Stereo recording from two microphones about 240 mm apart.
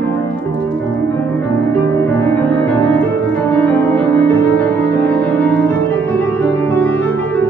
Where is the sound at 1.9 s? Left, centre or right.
Centre.